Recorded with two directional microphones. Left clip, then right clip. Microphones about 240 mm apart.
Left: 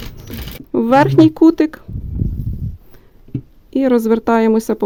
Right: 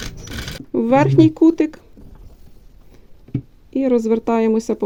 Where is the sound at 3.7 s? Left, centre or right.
Centre.